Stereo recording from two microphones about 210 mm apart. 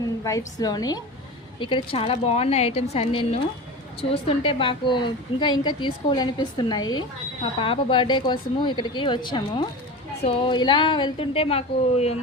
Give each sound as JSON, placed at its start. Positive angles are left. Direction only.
{"t": 0.3, "sound": "a woman's voice", "side_deg": 15}